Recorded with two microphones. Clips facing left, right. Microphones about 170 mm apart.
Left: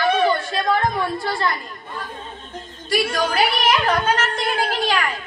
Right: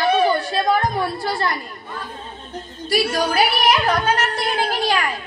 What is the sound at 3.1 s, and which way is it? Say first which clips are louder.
A woman's voice: right 1 dB; 35° right (ahead or behind).